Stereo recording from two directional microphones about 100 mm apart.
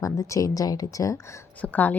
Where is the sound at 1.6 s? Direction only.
15° left (ahead or behind).